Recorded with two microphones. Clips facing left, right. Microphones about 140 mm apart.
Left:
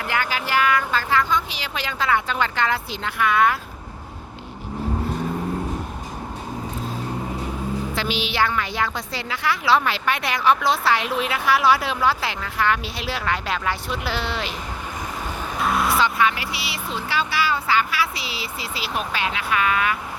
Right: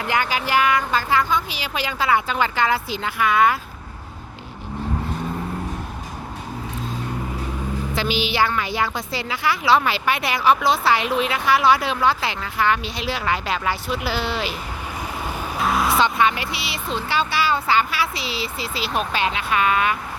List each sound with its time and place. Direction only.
0.1 s speech: 15° right (ahead or behind); by 3.6 s centre (ahead or behind)
7.9 s a woman's voice: centre (ahead or behind)
15.5 s vehicle: centre (ahead or behind)
16.0 s speech: 25° right (ahead or behind)